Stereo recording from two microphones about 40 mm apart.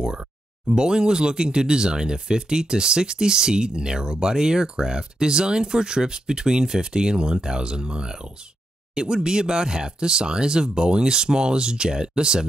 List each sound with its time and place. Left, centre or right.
0.7 s speech: centre